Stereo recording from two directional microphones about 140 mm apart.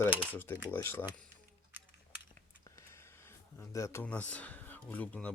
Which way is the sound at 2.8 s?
20° left (ahead or behind).